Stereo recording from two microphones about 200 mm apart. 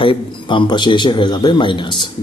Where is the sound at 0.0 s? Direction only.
25° left (ahead or behind).